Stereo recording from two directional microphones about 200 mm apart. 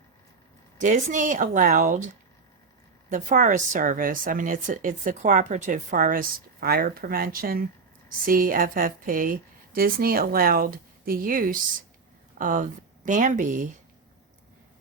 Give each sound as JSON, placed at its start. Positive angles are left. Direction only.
{"t": 0.8, "sound": "a woman's voice", "side_deg": -40}
{"t": 3.1, "sound": "a woman's voice", "side_deg": -40}